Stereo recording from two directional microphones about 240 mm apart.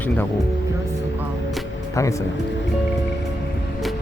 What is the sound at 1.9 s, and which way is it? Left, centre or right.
Speech, centre.